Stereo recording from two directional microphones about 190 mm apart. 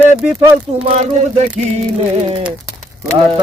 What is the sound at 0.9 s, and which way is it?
Speech, 40° right (ahead or behind).